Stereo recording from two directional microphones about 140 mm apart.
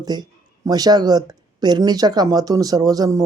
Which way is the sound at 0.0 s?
30° right (ahead or behind).